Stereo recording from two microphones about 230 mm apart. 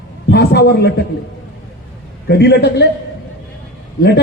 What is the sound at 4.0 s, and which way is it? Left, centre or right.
Speech, left.